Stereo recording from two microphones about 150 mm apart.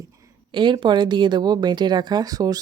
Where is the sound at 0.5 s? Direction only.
30° right (ahead or behind).